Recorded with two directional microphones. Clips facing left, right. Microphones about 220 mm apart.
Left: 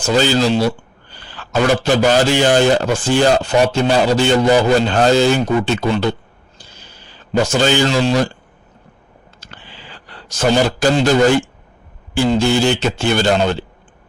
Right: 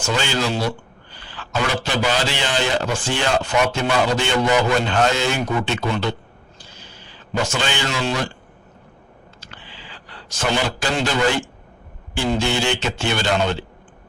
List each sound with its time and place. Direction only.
0.0 s speech: 35° left (ahead or behind)
7.4 s speech: 40° left (ahead or behind)
9.4 s a sound: 45° left (ahead or behind)
12.1 s speech: 40° left (ahead or behind)